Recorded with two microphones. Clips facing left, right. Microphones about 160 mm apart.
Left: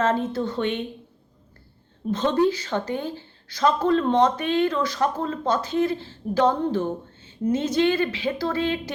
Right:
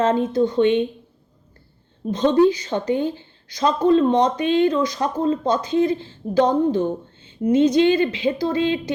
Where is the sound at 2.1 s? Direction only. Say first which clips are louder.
Right 5 dB; 15° right (ahead or behind).